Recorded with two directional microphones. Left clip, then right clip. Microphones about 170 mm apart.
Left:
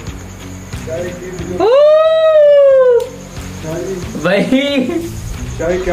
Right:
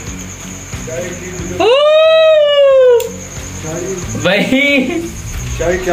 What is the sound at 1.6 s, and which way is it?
Speech, 20° left (ahead or behind).